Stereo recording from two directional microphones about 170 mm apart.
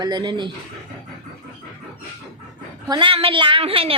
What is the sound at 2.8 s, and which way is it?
A woman's voice, 25° right (ahead or behind).